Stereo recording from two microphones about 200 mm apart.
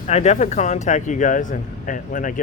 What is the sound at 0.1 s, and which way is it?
Speech, 35° left (ahead or behind).